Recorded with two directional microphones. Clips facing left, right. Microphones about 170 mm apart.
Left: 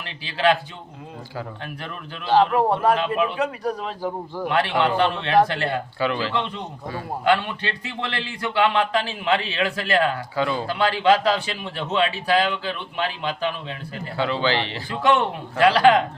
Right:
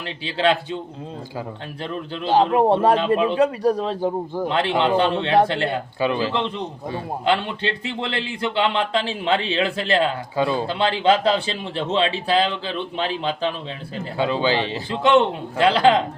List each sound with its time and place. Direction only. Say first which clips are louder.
0.3 s a man's voice: even; 30° right (ahead or behind)
2.3 s a man's voice: right 2 dB; 20° right (ahead or behind)
14.2 s a man's voice: right 2 dB; 15° right (ahead or behind)